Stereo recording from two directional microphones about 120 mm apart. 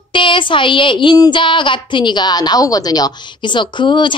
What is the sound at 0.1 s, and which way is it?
A woman's voice, 45° left (ahead or behind).